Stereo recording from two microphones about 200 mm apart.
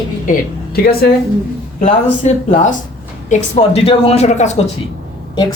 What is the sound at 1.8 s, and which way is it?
Speech, 35° left (ahead or behind).